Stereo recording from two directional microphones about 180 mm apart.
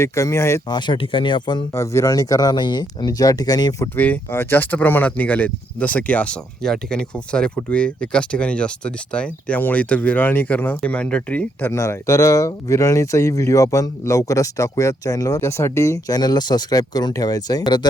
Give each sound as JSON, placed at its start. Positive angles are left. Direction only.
{"t": 0.0, "sound": "speech", "side_deg": 15}
{"t": 3.9, "sound": "speech", "side_deg": 10}